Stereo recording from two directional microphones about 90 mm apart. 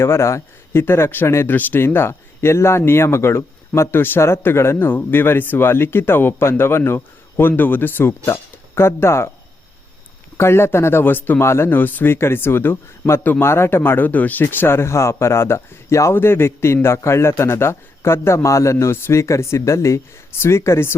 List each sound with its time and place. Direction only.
0.0 s speech: 30° left (ahead or behind)
10.3 s speech: 30° left (ahead or behind)